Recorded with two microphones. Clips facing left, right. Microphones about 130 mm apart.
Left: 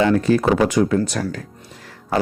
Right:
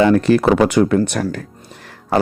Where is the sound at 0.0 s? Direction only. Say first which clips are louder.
Right 4 dB; 65° right (ahead or behind).